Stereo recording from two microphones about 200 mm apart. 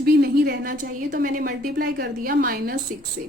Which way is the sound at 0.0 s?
55° right (ahead or behind).